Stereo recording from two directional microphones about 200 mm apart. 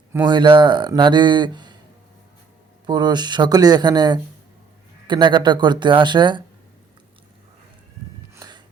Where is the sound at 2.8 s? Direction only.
20° right (ahead or behind).